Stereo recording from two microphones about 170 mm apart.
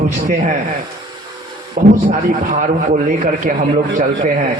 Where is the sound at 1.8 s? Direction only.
60° right (ahead or behind).